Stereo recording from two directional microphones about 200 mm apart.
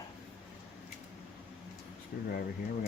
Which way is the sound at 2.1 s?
50° left (ahead or behind).